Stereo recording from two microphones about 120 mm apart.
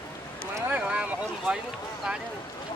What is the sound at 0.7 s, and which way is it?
Speech, 10° right (ahead or behind).